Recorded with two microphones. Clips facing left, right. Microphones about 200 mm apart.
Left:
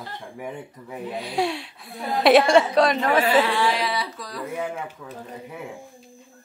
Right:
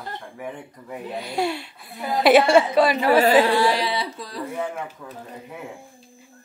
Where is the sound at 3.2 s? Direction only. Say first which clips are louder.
Right 4 dB; 40° right (ahead or behind).